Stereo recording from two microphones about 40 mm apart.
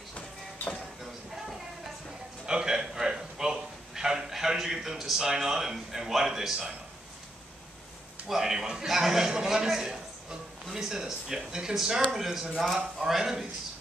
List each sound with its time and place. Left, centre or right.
2.4 s a sound: centre
5.2 s a man's voice: centre
8.3 s a man's voice: centre
9.3 s a man's voice: centre
9.7 s a man's voice: centre